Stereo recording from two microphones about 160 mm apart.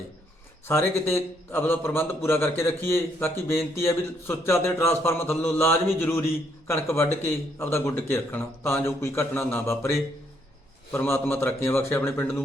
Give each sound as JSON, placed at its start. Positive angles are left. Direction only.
{"t": 0.7, "sound": "a man's voice", "side_deg": 15}
{"t": 10.9, "sound": "a man's voice", "side_deg": 15}